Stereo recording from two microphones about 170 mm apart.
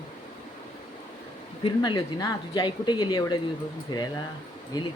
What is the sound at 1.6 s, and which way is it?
Speech, 25° left (ahead or behind).